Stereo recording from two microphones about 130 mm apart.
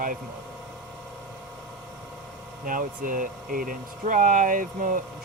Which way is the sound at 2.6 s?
90° right.